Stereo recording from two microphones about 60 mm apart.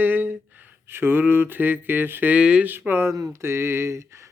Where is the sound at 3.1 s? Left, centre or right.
Right.